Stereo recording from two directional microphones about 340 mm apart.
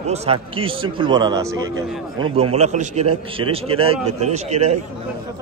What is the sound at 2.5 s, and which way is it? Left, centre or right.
A man's voice, centre.